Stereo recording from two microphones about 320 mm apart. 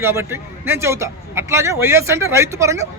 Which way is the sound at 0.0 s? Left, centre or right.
Centre.